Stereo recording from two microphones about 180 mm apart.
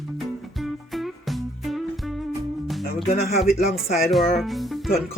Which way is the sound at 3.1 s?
55° left (ahead or behind).